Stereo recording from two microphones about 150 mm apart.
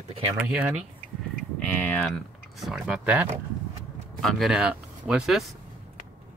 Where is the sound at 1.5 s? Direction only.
10° left (ahead or behind).